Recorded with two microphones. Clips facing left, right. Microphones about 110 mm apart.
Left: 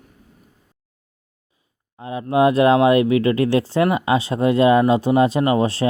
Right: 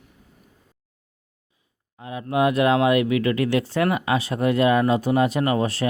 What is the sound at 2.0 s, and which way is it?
Speech, 30° left (ahead or behind).